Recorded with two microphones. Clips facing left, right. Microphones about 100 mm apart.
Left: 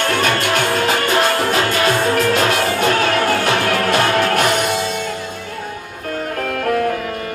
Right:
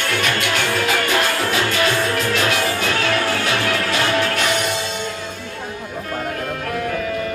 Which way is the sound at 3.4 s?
50° left (ahead or behind).